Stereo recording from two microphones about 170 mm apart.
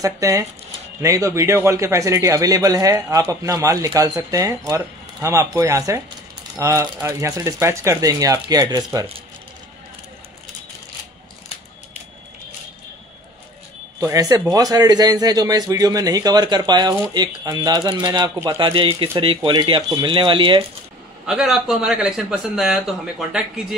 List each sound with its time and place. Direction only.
0.0 s a man's voice: 20° right (ahead or behind)
13.9 s a man's voice: 20° right (ahead or behind)
21.3 s a man's voice: 5° right (ahead or behind)